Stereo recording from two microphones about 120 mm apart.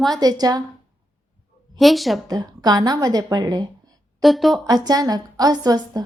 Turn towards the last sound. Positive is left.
turn(degrees=-35)  # may be behind; listen again after turning